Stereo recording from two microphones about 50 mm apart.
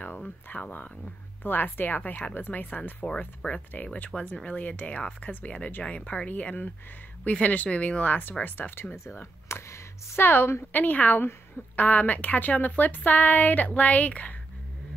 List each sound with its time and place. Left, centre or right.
0.0 s a woman's voice: left
8.2 s a woman's voice: left
10.7 s a woman's voice: left